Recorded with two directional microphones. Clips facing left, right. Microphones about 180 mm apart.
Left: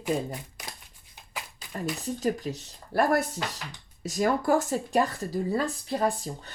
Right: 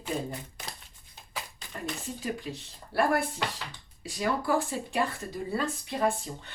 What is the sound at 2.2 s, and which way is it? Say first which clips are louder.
Speech: left 6 dB; 40° left (ahead or behind).